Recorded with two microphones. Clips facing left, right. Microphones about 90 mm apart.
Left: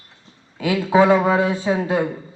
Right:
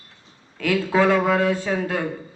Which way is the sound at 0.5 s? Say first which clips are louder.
Left 4 dB; 15° left (ahead or behind).